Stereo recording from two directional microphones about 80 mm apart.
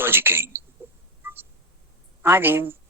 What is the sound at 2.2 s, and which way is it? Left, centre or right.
Speech, right.